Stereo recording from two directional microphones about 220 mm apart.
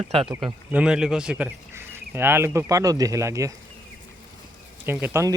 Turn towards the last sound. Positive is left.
turn(degrees=-10)  # may be behind; listen again after turning